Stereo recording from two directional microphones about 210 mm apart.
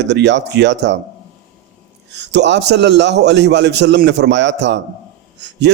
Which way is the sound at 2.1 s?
55° right (ahead or behind).